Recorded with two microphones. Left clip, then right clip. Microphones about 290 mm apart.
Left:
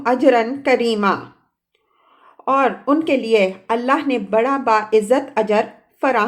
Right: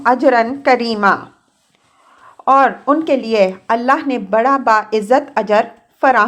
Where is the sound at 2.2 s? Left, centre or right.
Centre.